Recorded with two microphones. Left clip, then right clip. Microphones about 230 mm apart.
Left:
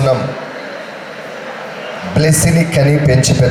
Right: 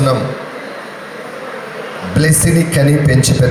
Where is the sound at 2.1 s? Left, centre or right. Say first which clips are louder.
Left 1 dB; right.